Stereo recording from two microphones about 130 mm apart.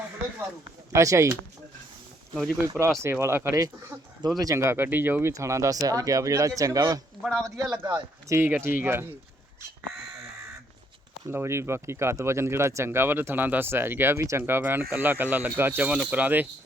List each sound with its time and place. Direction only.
0.9 s speech: 25° right (ahead or behind)
2.6 s speech: 20° right (ahead or behind)
7.2 s a man's voice: centre (ahead or behind)
7.4 s speech: 25° right (ahead or behind)
11.3 s speech: 20° right (ahead or behind)